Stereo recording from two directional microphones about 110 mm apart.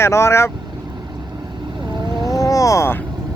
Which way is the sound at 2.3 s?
30° left (ahead or behind).